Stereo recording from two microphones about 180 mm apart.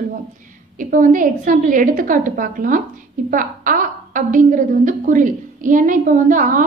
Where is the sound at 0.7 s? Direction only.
45° right (ahead or behind).